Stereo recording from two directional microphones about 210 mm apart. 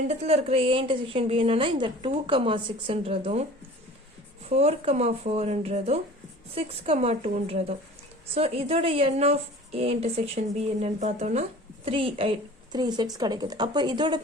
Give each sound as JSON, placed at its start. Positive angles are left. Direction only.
{"t": 0.1, "sound": "a woman's voice", "side_deg": -30}
{"t": 4.4, "sound": "a woman's voice", "side_deg": -30}